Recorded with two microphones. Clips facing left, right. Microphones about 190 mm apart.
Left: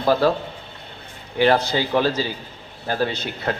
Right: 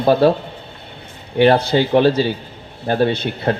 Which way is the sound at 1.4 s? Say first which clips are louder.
Right 5 dB; 30° right (ahead or behind).